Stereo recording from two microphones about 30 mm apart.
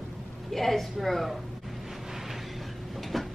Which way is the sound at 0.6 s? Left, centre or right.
Centre.